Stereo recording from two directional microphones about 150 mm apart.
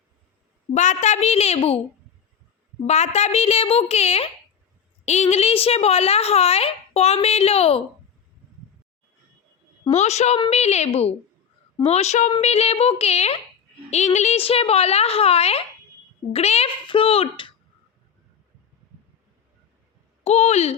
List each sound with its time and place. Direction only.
0.7 s speech: 50° left (ahead or behind)
2.8 s speech: 45° left (ahead or behind)
9.9 s a child's voice: 50° left (ahead or behind)
20.2 s speech: 45° left (ahead or behind)